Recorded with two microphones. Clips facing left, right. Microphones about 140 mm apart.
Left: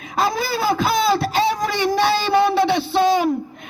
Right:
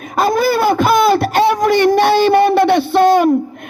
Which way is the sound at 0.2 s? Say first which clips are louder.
Right 7 dB; 55° right (ahead or behind).